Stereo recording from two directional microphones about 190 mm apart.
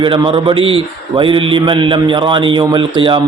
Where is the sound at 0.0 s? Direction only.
25° right (ahead or behind).